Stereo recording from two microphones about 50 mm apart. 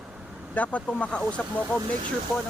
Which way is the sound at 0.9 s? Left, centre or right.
Left.